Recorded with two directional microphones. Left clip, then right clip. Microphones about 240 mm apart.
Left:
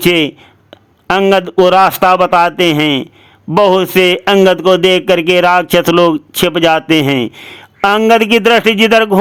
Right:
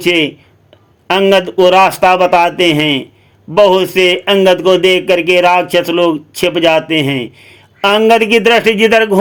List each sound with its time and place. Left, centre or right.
0.0 s a man's voice: left